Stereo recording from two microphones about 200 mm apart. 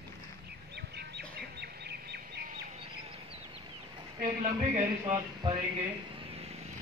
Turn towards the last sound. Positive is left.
turn(degrees=-30)  # may be behind; listen again after turning